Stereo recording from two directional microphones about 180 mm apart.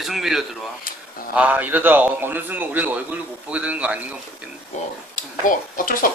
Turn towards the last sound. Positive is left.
turn(degrees=50)  # may be behind; listen again after turning